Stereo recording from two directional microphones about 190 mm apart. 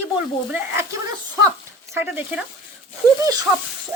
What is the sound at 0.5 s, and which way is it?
Speech, 10° right (ahead or behind).